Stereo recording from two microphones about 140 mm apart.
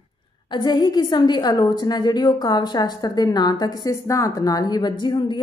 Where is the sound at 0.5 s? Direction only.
30° left (ahead or behind).